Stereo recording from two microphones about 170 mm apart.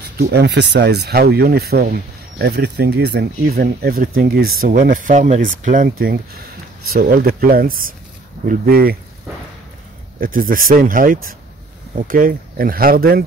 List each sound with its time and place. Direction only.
0.2 s speech: 75° right (ahead or behind)
10.2 s speech: 55° right (ahead or behind)